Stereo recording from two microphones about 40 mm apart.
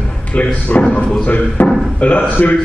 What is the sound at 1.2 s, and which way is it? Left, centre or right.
A man's voice, left.